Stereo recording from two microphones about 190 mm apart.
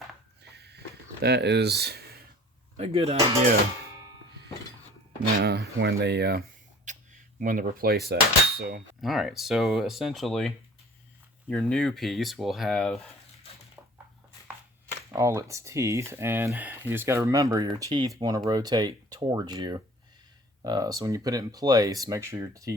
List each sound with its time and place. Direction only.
0.4 s a sound: 60° right (ahead or behind)
1.2 s speech: 60° right (ahead or behind)
2.7 s speech: 30° right (ahead or behind)
5.4 s speech: 60° right (ahead or behind)
6.9 s a sound: 40° right (ahead or behind)
7.3 s speech: 45° right (ahead or behind)
9.0 s speech: centre (ahead or behind)
15.1 s speech: 15° right (ahead or behind)